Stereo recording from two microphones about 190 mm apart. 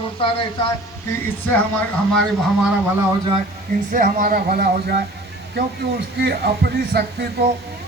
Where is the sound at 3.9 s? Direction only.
45° right (ahead or behind).